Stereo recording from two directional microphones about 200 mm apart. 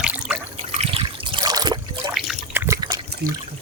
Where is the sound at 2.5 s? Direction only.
15° right (ahead or behind).